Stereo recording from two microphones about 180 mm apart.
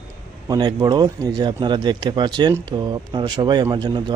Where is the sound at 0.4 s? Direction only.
20° right (ahead or behind).